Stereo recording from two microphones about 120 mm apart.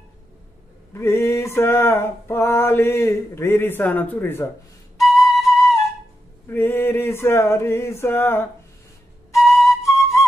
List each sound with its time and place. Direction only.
0.9 s mantra: 25° left (ahead or behind)
4.9 s flute: centre (ahead or behind)
6.5 s mantra: 20° left (ahead or behind)
9.3 s flute: centre (ahead or behind)